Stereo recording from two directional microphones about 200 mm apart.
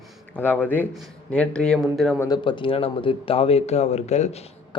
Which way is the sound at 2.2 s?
20° left (ahead or behind).